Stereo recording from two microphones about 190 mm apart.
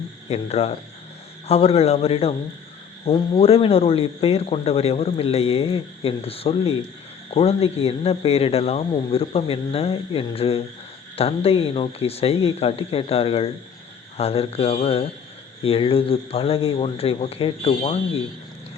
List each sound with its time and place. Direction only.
0.3 s a man's voice: 35° left (ahead or behind)